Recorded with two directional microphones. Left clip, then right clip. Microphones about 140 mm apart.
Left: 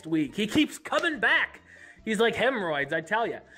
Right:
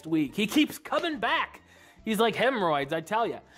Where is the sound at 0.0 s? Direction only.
25° right (ahead or behind).